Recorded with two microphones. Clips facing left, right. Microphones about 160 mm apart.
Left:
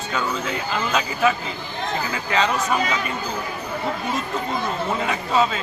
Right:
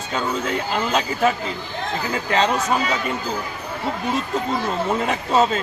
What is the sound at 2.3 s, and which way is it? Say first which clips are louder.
Speech: right 1 dB; 35° right (ahead or behind).